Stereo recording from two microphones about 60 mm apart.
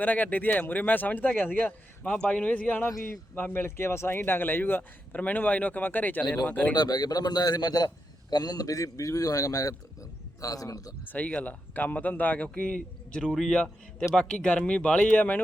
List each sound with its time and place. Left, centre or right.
0.0 s speech: left
6.9 s a man's voice: left
11.0 s speech: left